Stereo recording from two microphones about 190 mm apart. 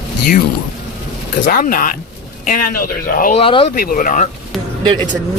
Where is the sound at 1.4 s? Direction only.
45° left (ahead or behind).